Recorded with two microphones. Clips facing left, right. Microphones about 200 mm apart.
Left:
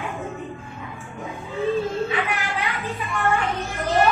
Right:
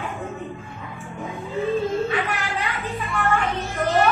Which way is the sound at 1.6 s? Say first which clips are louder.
Right 1 dB; centre (ahead or behind).